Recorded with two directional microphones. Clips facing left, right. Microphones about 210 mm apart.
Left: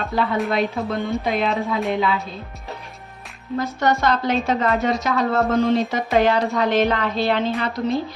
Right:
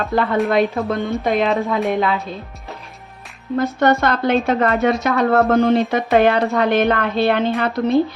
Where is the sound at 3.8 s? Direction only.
60° right (ahead or behind).